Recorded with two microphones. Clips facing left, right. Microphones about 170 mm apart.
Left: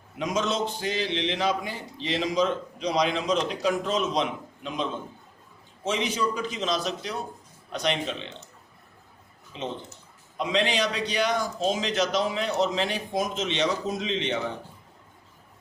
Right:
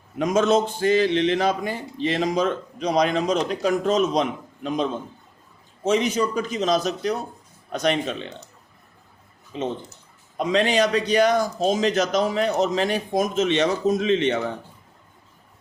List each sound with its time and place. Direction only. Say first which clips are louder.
0.2 s a man's voice: right 8 dB; 50° right (ahead or behind)
9.5 s a man's voice: right 6 dB; 50° right (ahead or behind)